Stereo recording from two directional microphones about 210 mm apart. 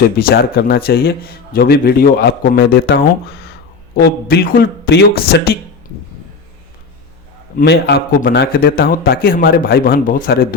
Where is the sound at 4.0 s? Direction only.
45° left (ahead or behind).